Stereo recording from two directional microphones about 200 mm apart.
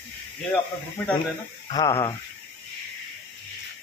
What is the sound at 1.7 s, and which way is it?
Speech, 15° left (ahead or behind).